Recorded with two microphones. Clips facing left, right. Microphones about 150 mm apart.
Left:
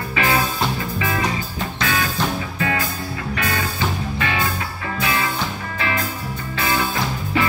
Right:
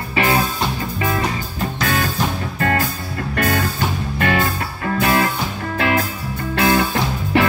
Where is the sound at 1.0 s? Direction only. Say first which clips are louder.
Right 3 dB; 40° right (ahead or behind).